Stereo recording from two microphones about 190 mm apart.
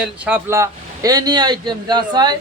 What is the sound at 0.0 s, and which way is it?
A man's voice, 10° right (ahead or behind).